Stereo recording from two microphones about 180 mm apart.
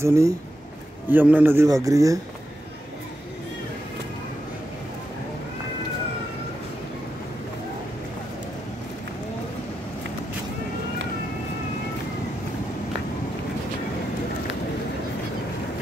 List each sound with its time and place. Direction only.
0.0 s a man's voice: 15° right (ahead or behind)